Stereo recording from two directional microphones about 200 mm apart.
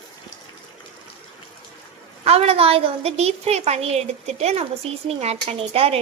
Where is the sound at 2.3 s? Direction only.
30° right (ahead or behind).